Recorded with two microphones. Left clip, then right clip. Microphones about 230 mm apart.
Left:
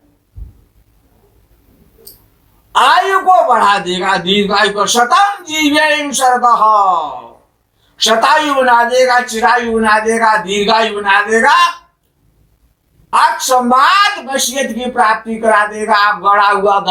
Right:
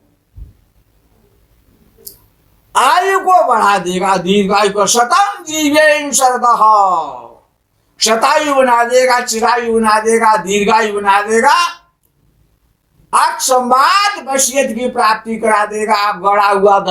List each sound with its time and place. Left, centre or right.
2.7 s a woman's voice: right
13.1 s a woman's voice: right